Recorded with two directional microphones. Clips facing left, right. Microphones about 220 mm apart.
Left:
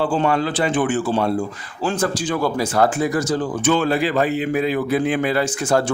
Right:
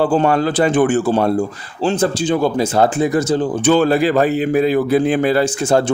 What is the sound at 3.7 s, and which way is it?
A man's voice, 40° right (ahead or behind).